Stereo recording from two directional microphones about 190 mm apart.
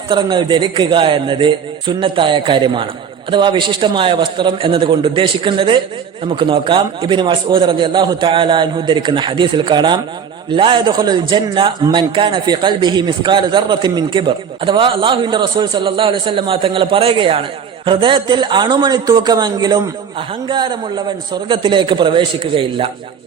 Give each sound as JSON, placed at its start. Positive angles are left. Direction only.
{"t": 0.1, "sound": "a man's voice", "side_deg": -25}